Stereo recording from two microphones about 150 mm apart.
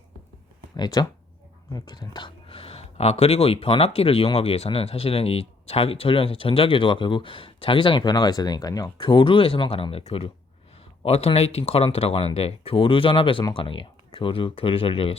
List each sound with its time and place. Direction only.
0.8 s speech: 25° left (ahead or behind)